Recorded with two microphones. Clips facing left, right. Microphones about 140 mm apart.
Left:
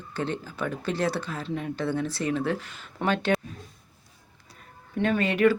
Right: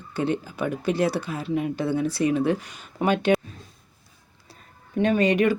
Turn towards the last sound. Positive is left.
turn(degrees=-20)  # may be behind; listen again after turning